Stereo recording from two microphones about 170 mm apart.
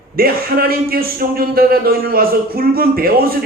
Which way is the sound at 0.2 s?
60° right (ahead or behind).